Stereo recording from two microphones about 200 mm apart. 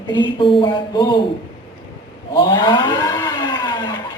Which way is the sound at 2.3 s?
20° left (ahead or behind).